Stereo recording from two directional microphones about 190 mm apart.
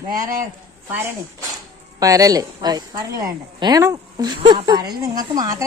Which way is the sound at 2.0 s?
20° right (ahead or behind).